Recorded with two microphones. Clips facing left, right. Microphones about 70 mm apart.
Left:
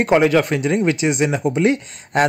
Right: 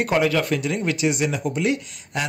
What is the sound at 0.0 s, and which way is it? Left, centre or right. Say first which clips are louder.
Speech: left 6 dB; left.